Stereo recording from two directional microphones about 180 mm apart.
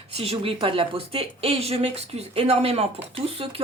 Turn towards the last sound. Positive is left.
turn(degrees=-30)  # may be behind; listen again after turning